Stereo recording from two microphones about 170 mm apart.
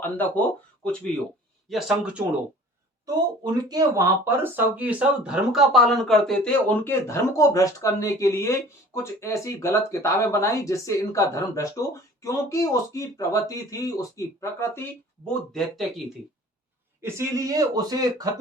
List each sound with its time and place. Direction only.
0.0 s speech: 10° left (ahead or behind)
3.4 s speech: 25° right (ahead or behind); by 14.8 s 15° left (ahead or behind)
15.3 s speech: centre (ahead or behind)
17.0 s speech: 20° right (ahead or behind)